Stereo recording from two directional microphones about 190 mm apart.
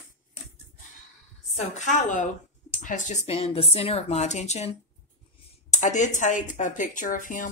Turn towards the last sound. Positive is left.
turn(degrees=45)  # may be behind; listen again after turning